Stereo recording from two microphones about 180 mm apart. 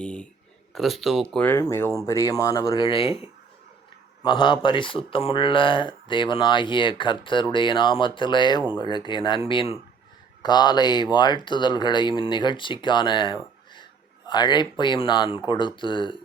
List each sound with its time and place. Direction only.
0.0 s a sound: 5° left (ahead or behind)
0.7 s speech: centre (ahead or behind); by 2.6 s 20° left (ahead or behind)
2.6 s speech: 30° left (ahead or behind)